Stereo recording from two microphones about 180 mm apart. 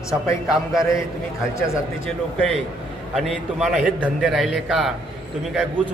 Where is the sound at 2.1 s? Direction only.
Centre (ahead or behind).